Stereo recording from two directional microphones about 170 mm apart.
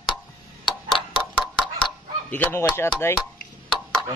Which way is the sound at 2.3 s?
10° left (ahead or behind).